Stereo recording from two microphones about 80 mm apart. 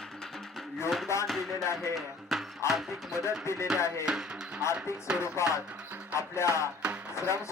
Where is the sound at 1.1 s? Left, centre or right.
Left.